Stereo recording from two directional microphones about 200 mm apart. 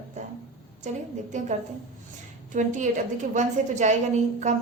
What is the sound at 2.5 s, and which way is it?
A woman's voice, 40° right (ahead or behind).